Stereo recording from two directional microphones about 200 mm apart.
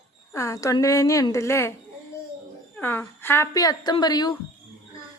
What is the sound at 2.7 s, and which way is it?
Speech, 10° left (ahead or behind).